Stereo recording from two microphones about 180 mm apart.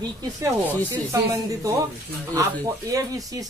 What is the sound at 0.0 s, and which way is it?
Speech, 20° right (ahead or behind).